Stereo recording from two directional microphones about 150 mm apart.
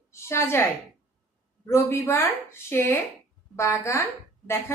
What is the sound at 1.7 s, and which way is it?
A woman's voice, 20° left (ahead or behind).